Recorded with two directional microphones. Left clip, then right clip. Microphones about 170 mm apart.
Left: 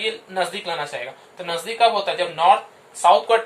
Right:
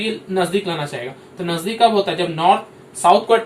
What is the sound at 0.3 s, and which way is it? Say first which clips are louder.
Speech: right 6 dB; 25° left (ahead or behind).